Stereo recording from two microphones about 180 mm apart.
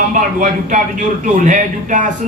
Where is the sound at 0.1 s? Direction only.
45° right (ahead or behind).